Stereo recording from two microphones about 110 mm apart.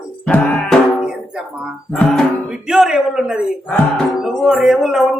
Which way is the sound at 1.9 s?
5° left (ahead or behind).